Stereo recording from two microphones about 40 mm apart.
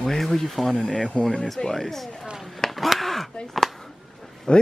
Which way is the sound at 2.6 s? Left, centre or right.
Centre.